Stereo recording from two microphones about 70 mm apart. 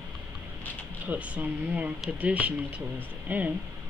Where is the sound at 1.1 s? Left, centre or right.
Right.